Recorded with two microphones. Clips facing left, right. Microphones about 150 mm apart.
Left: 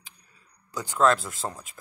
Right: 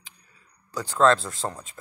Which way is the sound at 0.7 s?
15° left (ahead or behind).